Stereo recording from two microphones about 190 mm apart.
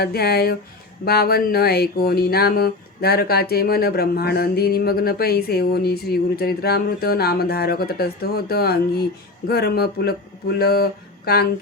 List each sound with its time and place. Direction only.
0.0 s speech: 55° left (ahead or behind)